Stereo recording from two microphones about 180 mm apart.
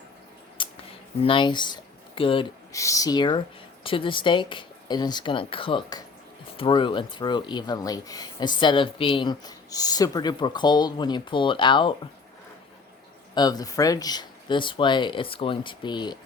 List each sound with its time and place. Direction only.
0.6 s scissors: 25° left (ahead or behind)
1.2 s speech: 30° left (ahead or behind)
2.7 s speech: 15° left (ahead or behind)
13.3 s speech: 20° left (ahead or behind)